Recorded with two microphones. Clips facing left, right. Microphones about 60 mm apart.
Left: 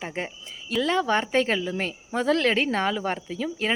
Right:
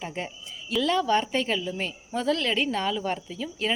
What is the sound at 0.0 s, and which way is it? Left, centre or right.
Speech, left.